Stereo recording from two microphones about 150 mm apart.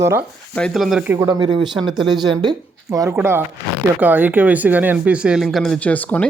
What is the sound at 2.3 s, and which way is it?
A woman's voice, 30° right (ahead or behind).